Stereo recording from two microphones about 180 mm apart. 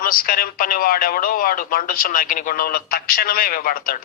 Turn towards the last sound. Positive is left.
turn(degrees=50)  # may be behind; listen again after turning